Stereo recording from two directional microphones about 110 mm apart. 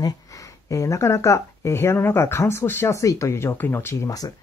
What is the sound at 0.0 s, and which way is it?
Speech, 30° left (ahead or behind).